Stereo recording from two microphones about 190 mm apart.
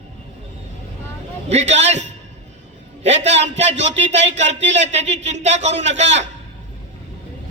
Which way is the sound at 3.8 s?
35° right (ahead or behind).